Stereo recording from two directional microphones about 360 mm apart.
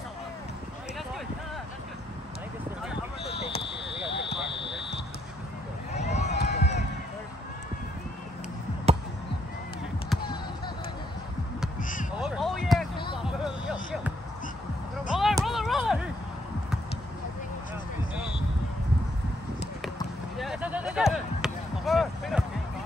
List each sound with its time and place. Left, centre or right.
3.4 s basketball bounce: centre
5.9 s run: centre
11.8 s crow: left
12.2 s basketball bounce: centre
12.9 s basketball bounce: centre
13.2 s basketball bounce: centre
15.1 s a sound: centre
20.3 s a sound: centre